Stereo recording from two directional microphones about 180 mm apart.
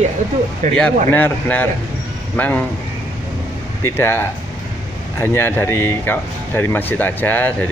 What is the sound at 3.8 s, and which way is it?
Speech, 15° left (ahead or behind).